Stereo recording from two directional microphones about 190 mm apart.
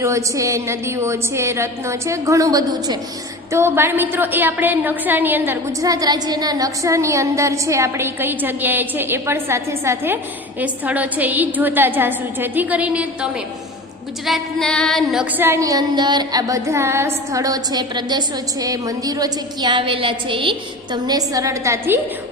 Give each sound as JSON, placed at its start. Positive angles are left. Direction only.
{"t": 0.0, "sound": "a woman's voice", "side_deg": -15}
{"t": 14.3, "sound": "female singing", "side_deg": 0}